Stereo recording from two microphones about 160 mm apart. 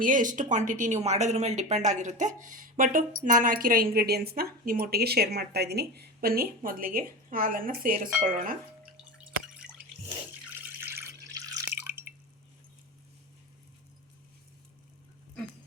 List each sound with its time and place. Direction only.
0.0 s speech: 55° right (ahead or behind)
3.9 s speech: 75° right (ahead or behind); by 8.5 s 55° right (ahead or behind)
9.1 s drip: 5° right (ahead or behind)